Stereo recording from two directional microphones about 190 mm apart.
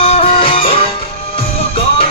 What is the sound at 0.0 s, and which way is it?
Music, 30° left (ahead or behind).